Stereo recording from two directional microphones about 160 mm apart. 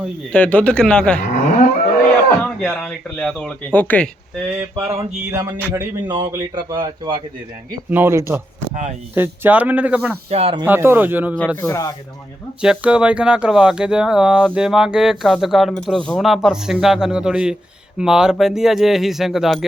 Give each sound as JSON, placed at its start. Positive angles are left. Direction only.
{"t": 0.3, "sound": "speech", "side_deg": 10}
{"t": 1.3, "sound": "livestock", "side_deg": 55}
{"t": 2.4, "sound": "speech", "side_deg": 10}
{"t": 4.9, "sound": "speech", "side_deg": -15}
{"t": 5.7, "sound": "speech", "side_deg": -30}
{"t": 7.9, "sound": "speech", "side_deg": -15}
{"t": 10.2, "sound": "speech", "side_deg": -40}
{"t": 10.7, "sound": "speech", "side_deg": -15}
{"t": 11.6, "sound": "speech", "side_deg": 20}
{"t": 12.6, "sound": "speech", "side_deg": -5}